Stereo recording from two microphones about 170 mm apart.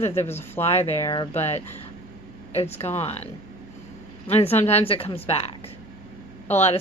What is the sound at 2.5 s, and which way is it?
A woman's voice, 35° left (ahead or behind).